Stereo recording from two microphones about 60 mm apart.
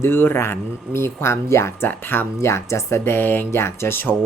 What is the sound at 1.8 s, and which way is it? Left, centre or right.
Speech, left.